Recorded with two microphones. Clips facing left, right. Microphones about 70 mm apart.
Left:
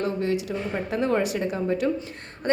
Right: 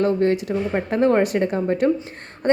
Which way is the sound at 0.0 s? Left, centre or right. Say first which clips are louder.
Right 7 dB; right.